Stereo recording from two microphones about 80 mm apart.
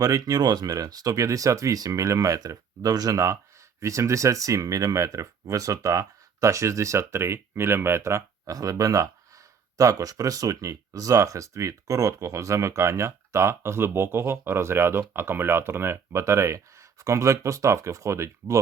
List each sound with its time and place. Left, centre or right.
0.0 s speech: right
8.5 s speech: right